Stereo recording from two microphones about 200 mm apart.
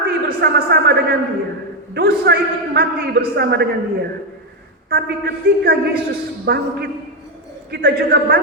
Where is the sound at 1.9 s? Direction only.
50° right (ahead or behind).